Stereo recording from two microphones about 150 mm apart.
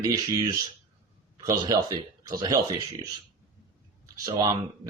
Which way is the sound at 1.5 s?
25° right (ahead or behind).